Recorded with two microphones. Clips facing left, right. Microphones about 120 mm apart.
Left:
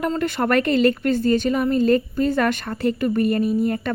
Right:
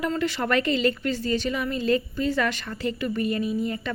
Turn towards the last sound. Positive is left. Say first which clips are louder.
# left 6 dB
turn(degrees=50)  # may be behind; listen again after turning